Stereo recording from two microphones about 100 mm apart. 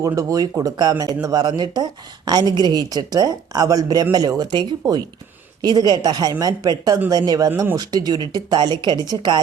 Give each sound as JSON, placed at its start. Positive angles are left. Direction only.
{"t": 0.0, "sound": "speech", "side_deg": -35}